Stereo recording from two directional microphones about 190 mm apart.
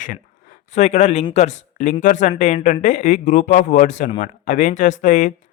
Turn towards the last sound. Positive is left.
turn(degrees=40)  # may be behind; listen again after turning